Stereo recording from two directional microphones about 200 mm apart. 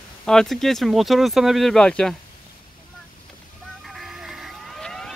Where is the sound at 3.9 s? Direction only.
Centre (ahead or behind).